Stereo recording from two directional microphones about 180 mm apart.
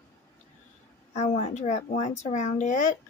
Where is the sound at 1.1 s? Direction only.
40° left (ahead or behind).